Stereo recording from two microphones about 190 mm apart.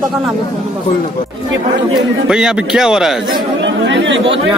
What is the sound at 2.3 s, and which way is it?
Speech, 5° right (ahead or behind).